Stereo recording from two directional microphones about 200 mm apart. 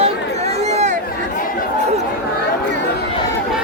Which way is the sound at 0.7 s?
35° right (ahead or behind).